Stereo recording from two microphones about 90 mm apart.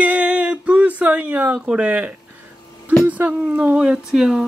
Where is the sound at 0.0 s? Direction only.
15° right (ahead or behind).